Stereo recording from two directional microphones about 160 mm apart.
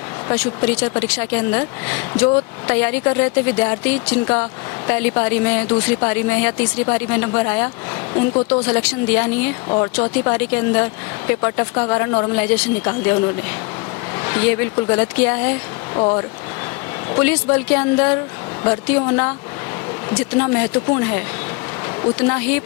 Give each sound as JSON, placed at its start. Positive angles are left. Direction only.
{"t": 0.3, "sound": "speech", "side_deg": 10}
{"t": 9.6, "sound": "speech", "side_deg": 20}
{"t": 9.9, "sound": "speech", "side_deg": 10}
{"t": 16.0, "sound": "speech", "side_deg": 25}
{"t": 17.1, "sound": "speech", "side_deg": 10}